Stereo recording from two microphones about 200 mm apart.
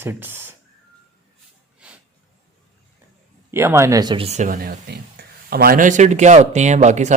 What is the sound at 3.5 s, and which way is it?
Speech, 15° right (ahead or behind).